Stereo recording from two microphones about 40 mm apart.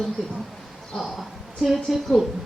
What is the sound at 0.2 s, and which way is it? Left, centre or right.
A woman's voice, centre.